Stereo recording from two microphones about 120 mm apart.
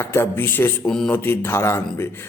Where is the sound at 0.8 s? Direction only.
5° left (ahead or behind).